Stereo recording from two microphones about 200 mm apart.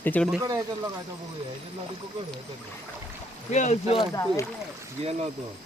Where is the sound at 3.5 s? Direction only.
35° left (ahead or behind); by 4.4 s 15° left (ahead or behind).